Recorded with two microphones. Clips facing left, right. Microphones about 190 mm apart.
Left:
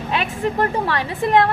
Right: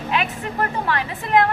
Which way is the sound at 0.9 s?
35° left (ahead or behind).